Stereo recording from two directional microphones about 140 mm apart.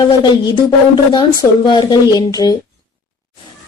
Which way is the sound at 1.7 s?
30° left (ahead or behind).